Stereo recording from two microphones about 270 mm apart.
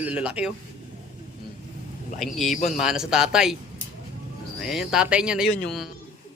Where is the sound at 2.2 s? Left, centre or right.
Centre.